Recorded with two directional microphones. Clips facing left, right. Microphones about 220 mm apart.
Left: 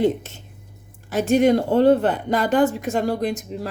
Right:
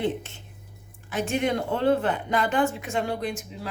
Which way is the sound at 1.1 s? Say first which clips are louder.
Left 9 dB; 40° left (ahead or behind).